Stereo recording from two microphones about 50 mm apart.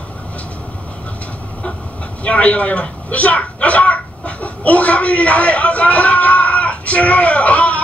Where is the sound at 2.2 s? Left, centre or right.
Left.